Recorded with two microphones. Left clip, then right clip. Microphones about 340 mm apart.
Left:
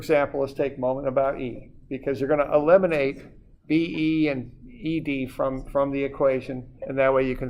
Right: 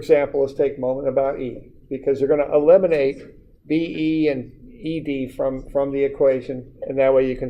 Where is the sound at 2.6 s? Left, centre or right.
Left.